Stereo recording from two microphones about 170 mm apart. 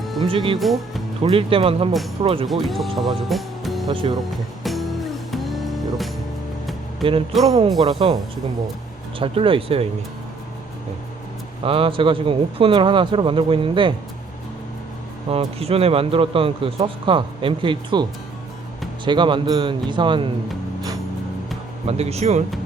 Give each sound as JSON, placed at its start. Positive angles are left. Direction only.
{"t": 0.0, "sound": "music", "side_deg": 0}
{"t": 0.3, "sound": "speech", "side_deg": -30}
{"t": 0.6, "sound": "speech", "side_deg": 0}
{"t": 1.2, "sound": "speech", "side_deg": -30}
{"t": 2.5, "sound": "speech", "side_deg": 0}
{"t": 3.8, "sound": "a man's voice", "side_deg": -25}
{"t": 4.6, "sound": "music", "side_deg": 0}
{"t": 7.3, "sound": "speech", "side_deg": 0}
{"t": 7.8, "sound": "a man's voice", "side_deg": -25}
{"t": 11.6, "sound": "speech", "side_deg": -30}
{"t": 15.3, "sound": "speech", "side_deg": -35}
{"t": 19.0, "sound": "a man's voice", "side_deg": -30}
{"t": 21.8, "sound": "speech", "side_deg": -35}